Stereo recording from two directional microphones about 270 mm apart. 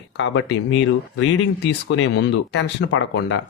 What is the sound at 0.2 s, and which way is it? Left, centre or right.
Speech, left.